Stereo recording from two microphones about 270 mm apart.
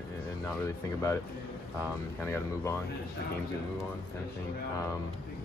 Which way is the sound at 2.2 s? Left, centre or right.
Centre.